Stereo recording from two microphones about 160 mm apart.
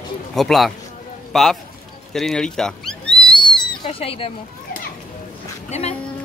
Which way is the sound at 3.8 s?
35° left (ahead or behind).